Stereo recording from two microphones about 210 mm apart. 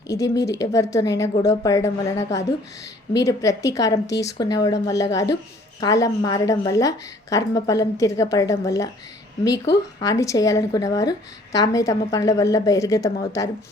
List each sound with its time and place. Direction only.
0.1 s a woman's voice: 15° left (ahead or behind)
10.0 s a woman's voice: 15° left (ahead or behind)